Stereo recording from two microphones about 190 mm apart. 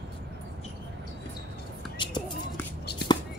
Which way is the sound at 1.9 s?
25° left (ahead or behind).